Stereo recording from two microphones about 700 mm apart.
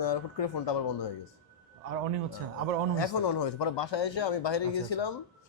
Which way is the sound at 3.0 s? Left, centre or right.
Left.